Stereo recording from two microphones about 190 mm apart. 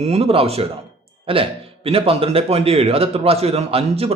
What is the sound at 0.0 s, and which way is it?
A man's voice, 35° right (ahead or behind).